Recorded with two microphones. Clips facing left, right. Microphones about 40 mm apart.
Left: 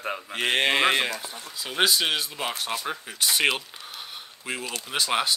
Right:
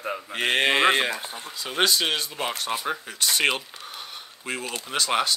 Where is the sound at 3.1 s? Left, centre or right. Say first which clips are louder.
Left 1 dB; centre.